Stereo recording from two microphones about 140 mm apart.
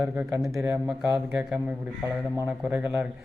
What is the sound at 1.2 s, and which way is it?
A man's voice, 10° right (ahead or behind).